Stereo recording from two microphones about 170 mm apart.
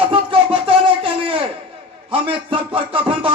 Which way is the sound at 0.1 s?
30° right (ahead or behind).